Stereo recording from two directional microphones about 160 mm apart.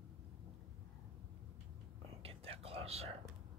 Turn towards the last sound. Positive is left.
turn(degrees=-40)  # may be behind; listen again after turning